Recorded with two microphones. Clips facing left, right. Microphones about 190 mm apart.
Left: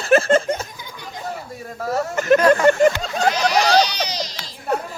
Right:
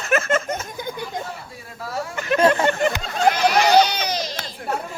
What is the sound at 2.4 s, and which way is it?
Speech, 25° right (ahead or behind).